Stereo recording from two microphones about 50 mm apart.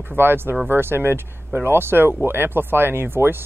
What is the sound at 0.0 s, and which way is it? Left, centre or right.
Speech, right.